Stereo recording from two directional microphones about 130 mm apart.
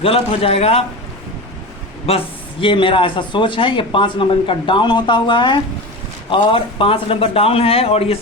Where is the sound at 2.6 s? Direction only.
40° left (ahead or behind).